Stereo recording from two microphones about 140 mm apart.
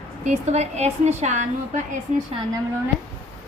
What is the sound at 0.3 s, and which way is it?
A woman's voice, 55° right (ahead or behind).